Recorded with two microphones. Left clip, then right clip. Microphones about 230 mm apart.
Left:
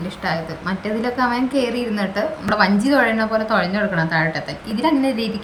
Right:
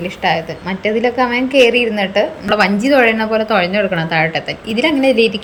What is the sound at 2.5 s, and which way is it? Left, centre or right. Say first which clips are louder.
A woman's voice: right 5 dB; centre.